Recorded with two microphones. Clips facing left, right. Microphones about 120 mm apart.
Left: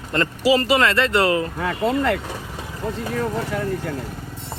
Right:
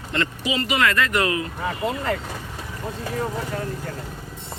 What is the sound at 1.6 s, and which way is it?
Speech, 65° left (ahead or behind).